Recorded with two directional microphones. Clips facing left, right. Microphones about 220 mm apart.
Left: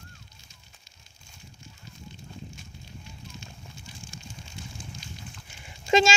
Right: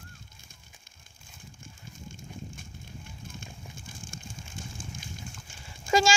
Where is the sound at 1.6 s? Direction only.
50° right (ahead or behind).